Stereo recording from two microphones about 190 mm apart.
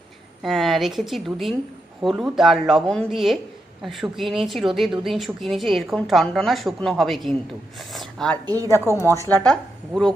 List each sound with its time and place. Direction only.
0.4 s speech: centre (ahead or behind)
7.8 s a sound: centre (ahead or behind)
8.4 s a woman's voice: 20° right (ahead or behind)
9.0 s speech: 15° left (ahead or behind)
9.3 s speech: 5° left (ahead or behind)